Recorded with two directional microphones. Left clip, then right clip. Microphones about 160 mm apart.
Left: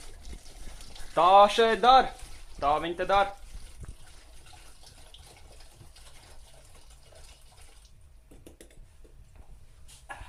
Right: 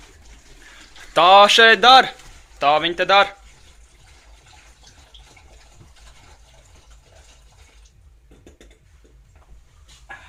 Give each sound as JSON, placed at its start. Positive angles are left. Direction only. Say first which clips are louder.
{"t": 1.1, "sound": "speech", "louder": "right 8 dB", "side_deg": -10}